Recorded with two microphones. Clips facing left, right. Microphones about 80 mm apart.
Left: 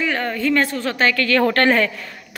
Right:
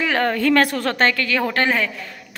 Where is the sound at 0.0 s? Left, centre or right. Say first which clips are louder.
Right 2 dB; right.